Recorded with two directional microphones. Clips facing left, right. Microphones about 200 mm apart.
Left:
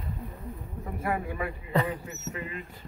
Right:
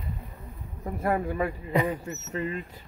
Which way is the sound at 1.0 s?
40° right (ahead or behind).